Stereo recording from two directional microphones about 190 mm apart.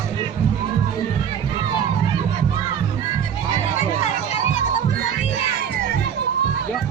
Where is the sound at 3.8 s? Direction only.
35° left (ahead or behind).